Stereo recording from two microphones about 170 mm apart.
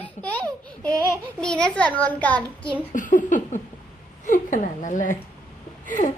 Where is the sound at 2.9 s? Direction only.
50° left (ahead or behind).